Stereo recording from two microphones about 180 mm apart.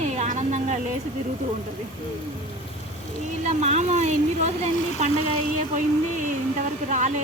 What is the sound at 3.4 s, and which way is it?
Speech, 40° right (ahead or behind).